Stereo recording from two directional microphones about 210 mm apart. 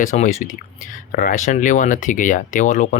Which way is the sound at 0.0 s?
35° left (ahead or behind).